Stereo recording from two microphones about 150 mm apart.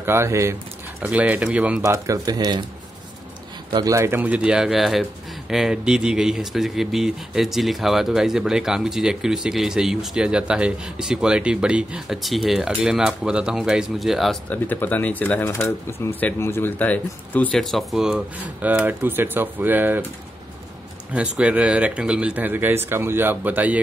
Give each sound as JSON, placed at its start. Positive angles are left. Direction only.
{"t": 0.0, "sound": "speech", "side_deg": -15}
{"t": 1.8, "sound": "speech", "side_deg": -20}
{"t": 3.7, "sound": "speech", "side_deg": -20}
{"t": 14.5, "sound": "speech", "side_deg": 10}
{"t": 21.1, "sound": "speech", "side_deg": -10}